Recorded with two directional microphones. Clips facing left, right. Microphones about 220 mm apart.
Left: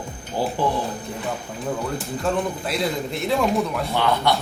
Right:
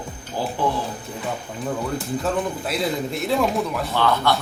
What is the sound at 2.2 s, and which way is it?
Speech, centre (ahead or behind).